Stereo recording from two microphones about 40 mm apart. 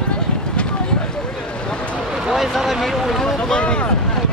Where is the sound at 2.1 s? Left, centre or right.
Centre.